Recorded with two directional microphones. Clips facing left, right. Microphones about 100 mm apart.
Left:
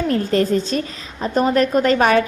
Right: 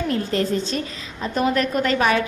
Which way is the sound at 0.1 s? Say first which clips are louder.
Left 5 dB; 45° left (ahead or behind).